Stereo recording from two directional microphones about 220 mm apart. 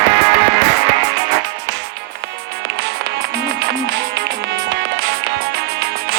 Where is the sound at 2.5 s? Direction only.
50° right (ahead or behind).